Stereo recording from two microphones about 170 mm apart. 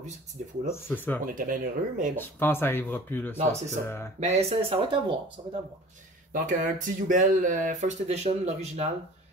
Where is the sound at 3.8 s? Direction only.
15° left (ahead or behind).